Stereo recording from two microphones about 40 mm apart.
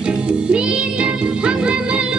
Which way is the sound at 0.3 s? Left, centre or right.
Right.